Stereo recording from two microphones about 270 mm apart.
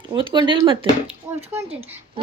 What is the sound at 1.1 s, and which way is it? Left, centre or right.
Speech, centre.